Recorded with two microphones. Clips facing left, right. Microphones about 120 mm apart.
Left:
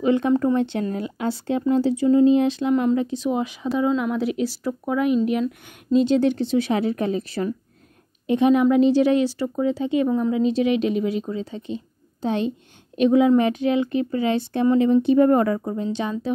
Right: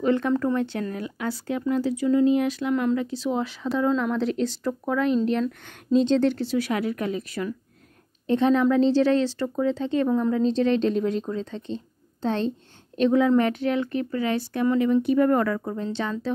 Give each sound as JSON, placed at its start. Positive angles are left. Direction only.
{"t": 0.0, "sound": "speech", "side_deg": 15}
{"t": 8.3, "sound": "speech", "side_deg": 15}